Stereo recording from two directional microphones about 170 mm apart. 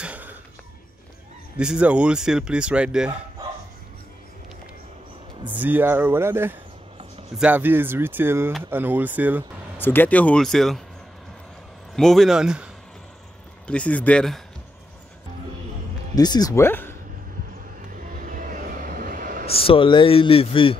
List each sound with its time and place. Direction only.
0.0 s a sound: 10° right (ahead or behind)
1.6 s speech: 5° right (ahead or behind)
5.5 s speech: 10° right (ahead or behind)
9.8 s speech: 10° left (ahead or behind)
11.9 s speech: centre (ahead or behind)
13.7 s speech: 5° left (ahead or behind)
16.2 s speech: 25° left (ahead or behind)
17.9 s vehicle: 55° right (ahead or behind)
19.4 s a man's voice: 35° left (ahead or behind)